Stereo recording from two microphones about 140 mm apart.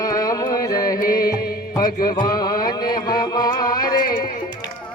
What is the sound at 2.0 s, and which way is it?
Music, 30° left (ahead or behind).